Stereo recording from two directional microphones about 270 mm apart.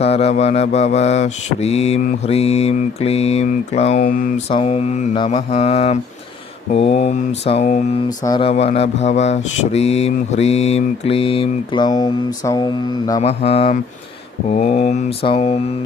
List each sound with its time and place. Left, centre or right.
0.0 s mantra: left